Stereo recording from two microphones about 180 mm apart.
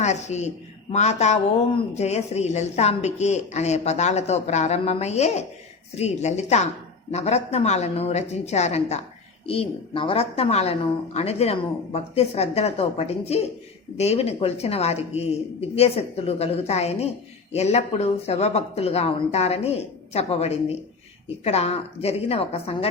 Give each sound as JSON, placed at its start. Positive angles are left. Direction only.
{"t": 0.0, "sound": "a woman's voice", "side_deg": 40}